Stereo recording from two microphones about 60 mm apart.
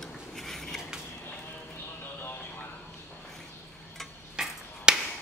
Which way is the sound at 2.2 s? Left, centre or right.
Left.